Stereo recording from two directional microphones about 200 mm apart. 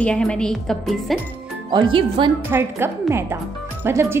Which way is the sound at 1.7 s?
25° right (ahead or behind).